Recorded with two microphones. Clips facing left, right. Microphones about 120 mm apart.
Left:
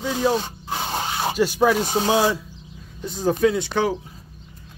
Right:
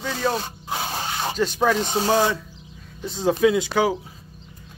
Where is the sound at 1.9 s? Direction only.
5° left (ahead or behind).